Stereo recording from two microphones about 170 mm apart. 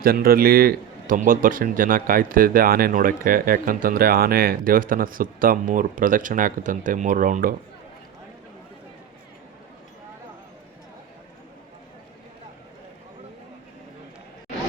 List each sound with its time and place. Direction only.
0.0 s a man's voice: 60° right (ahead or behind)